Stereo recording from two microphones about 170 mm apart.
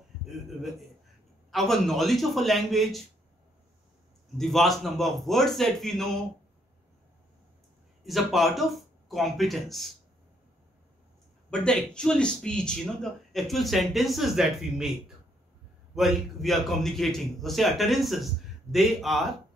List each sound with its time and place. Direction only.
0.6 s speech: centre (ahead or behind)
4.4 s speech: centre (ahead or behind)
8.0 s speech: centre (ahead or behind)
11.5 s speech: 5° left (ahead or behind)